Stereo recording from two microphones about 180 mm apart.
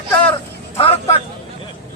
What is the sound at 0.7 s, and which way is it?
Speech, 30° left (ahead or behind).